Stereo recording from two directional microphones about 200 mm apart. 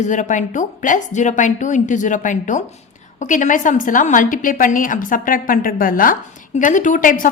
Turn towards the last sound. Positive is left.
turn(degrees=40)  # may be behind; listen again after turning